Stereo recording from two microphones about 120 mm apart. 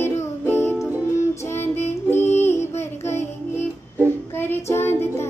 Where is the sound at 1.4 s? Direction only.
20° left (ahead or behind).